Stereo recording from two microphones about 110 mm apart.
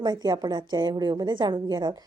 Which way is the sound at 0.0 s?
40° right (ahead or behind).